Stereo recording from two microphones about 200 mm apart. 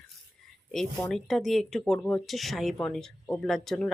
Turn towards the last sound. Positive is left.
turn(degrees=0)  # may be behind; listen again after turning